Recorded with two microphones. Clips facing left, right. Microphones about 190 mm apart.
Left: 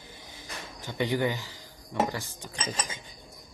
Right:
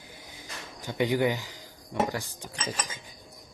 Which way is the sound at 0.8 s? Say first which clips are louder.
Right 2 dB; 15° right (ahead or behind).